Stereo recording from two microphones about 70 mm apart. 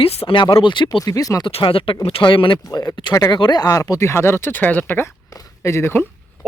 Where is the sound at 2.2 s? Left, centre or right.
Left.